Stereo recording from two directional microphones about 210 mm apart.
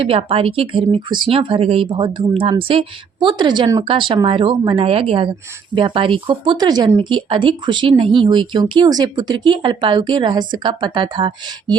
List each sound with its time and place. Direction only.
0.0 s speech: 25° right (ahead or behind)